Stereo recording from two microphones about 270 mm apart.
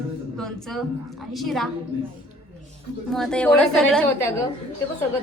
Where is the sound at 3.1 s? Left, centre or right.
Centre.